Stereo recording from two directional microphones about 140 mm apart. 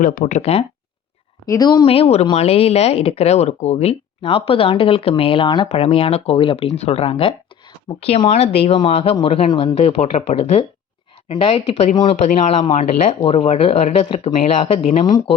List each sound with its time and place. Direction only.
0.0 s speech: 75° left (ahead or behind); by 0.6 s 55° left (ahead or behind)
1.5 s a woman's voice: 25° left (ahead or behind)
1.9 s speech: 45° left (ahead or behind)
12.2 s speech: 50° left (ahead or behind)